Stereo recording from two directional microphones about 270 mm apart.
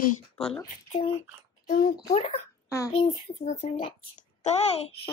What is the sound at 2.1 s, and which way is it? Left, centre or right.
A child's voice, left.